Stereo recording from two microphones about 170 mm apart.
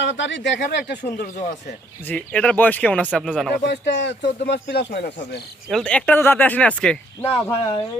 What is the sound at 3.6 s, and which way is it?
Speech, 90° left.